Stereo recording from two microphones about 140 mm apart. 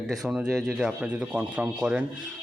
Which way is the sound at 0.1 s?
Centre (ahead or behind).